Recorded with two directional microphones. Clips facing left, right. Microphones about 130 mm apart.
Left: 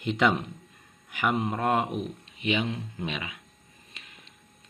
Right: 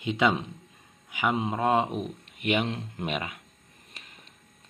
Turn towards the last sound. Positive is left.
turn(degrees=-40)  # may be behind; listen again after turning